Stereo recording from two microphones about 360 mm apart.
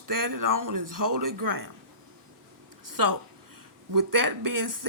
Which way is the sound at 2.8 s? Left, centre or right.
Right.